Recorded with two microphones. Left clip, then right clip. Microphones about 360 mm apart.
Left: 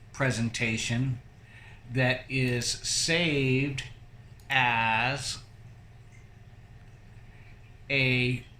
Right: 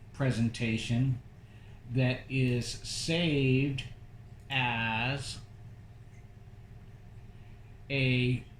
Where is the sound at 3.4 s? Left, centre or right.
Centre.